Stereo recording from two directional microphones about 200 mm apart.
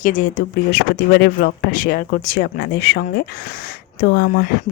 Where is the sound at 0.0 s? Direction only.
40° left (ahead or behind).